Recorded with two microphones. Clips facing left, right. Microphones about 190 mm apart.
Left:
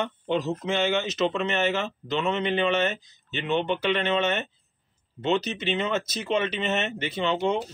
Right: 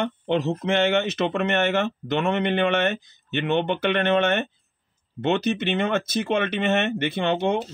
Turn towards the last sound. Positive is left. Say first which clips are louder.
# right 2 dB
turn(degrees=-60)  # may be behind; listen again after turning